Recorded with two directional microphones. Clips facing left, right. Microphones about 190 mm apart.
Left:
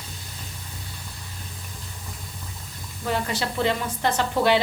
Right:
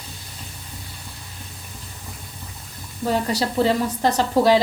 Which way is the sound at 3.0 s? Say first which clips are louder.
Right 5 dB; 35° right (ahead or behind).